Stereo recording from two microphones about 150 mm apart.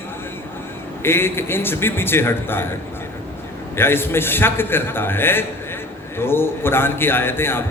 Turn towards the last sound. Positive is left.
turn(degrees=15)  # may be behind; listen again after turning